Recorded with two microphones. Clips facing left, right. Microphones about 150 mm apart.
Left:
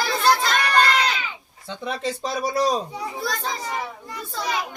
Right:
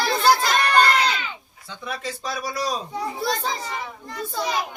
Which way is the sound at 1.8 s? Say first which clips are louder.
Left 3 dB; 25° left (ahead or behind).